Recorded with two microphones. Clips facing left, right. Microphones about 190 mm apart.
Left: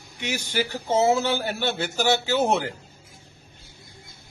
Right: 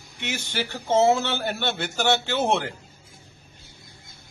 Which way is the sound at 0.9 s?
5° left (ahead or behind).